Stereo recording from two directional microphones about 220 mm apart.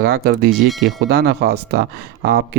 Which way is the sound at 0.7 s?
Centre (ahead or behind).